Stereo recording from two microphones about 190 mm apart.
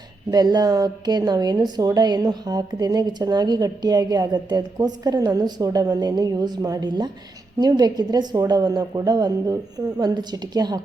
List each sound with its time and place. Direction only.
0.3 s a woman's voice: 20° right (ahead or behind)